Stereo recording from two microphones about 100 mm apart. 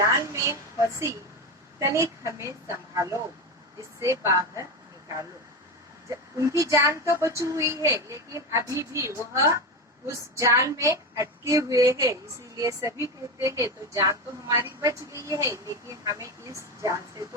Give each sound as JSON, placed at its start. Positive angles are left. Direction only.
{"t": 0.0, "sound": "speech", "side_deg": -30}
{"t": 6.3, "sound": "speech", "side_deg": -30}